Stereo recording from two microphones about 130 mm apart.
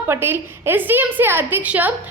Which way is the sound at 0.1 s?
20° right (ahead or behind).